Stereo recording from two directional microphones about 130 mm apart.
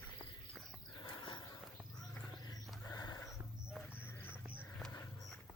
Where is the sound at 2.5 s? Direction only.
30° left (ahead or behind).